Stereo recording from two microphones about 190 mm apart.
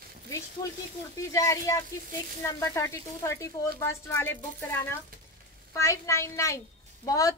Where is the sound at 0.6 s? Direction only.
15° left (ahead or behind).